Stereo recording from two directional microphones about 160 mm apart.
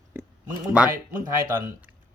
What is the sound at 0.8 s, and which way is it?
Speech, 5° right (ahead or behind).